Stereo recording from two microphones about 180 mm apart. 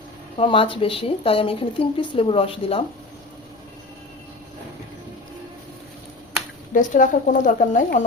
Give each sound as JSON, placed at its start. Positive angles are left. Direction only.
{"t": 0.3, "sound": "speech", "side_deg": 30}
{"t": 6.7, "sound": "speech", "side_deg": 45}